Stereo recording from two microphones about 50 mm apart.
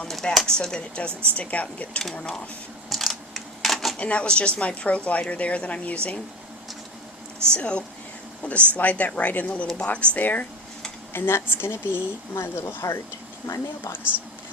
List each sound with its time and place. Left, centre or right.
0.1 s speech: centre; by 2.0 s left
2.1 s speech: centre
2.9 s a sound: centre
3.9 s speech: left
7.5 s speech: left
10.2 s speech: left
11.1 s speech: left